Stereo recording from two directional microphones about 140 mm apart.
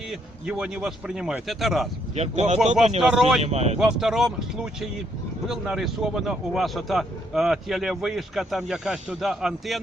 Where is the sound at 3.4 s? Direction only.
50° right (ahead or behind).